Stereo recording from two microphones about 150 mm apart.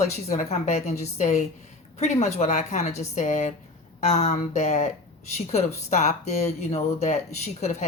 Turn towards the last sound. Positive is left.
turn(degrees=50)  # may be behind; listen again after turning